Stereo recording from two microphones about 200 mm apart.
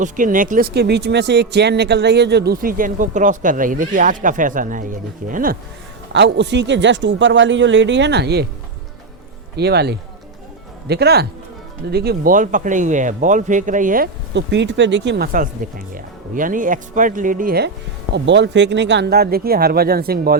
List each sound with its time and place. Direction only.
0.0 s speech: 40° right (ahead or behind)
6.1 s speech: 60° right (ahead or behind)
9.6 s speech: 55° right (ahead or behind)
14.3 s speech: 60° right (ahead or behind)
16.0 s speech: 40° right (ahead or behind)
18.1 s speech: 65° right (ahead or behind)